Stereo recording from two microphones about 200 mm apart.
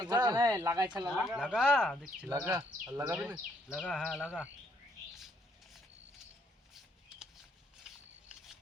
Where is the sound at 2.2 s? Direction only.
15° right (ahead or behind).